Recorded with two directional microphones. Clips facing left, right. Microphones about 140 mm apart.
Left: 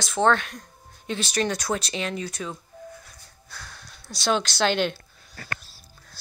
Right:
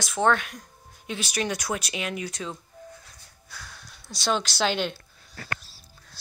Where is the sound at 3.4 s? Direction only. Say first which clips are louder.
Left 1 dB; 5° right (ahead or behind).